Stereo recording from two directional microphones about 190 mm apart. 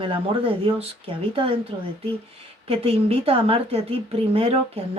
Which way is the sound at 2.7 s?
30° right (ahead or behind).